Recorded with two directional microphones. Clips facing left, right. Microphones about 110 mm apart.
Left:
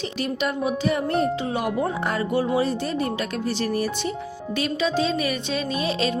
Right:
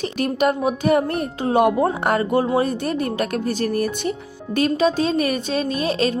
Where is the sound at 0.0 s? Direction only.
50° right (ahead or behind).